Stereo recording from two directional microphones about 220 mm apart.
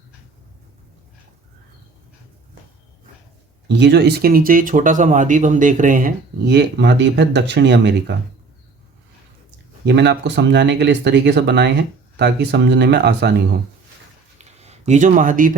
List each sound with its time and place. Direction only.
3.7 s speech: 50° right (ahead or behind)
9.8 s speech: 50° right (ahead or behind)
14.3 s a sound: 30° right (ahead or behind)